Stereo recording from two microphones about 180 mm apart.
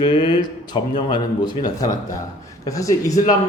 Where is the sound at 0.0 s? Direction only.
25° left (ahead or behind).